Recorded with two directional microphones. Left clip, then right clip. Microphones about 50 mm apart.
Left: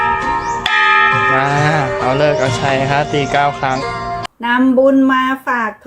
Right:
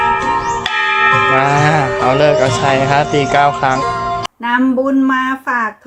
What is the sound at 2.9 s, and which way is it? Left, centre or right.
Speech, centre.